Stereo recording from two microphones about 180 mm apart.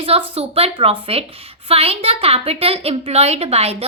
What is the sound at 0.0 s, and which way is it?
A woman's voice, 35° right (ahead or behind).